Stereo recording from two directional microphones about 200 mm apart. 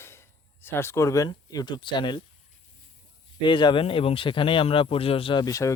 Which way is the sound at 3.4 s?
25° left (ahead or behind).